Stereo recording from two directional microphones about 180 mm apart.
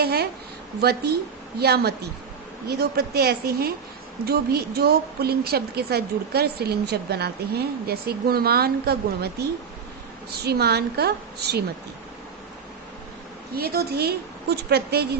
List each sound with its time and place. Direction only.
0.0 s a woman's voice: 60° right (ahead or behind)
13.6 s a woman's voice: 60° right (ahead or behind)